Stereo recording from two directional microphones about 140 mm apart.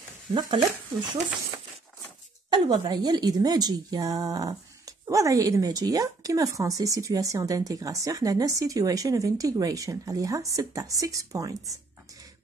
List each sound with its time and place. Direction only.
0.3 s speech: 35° right (ahead or behind)
2.5 s a woman's voice: 30° right (ahead or behind)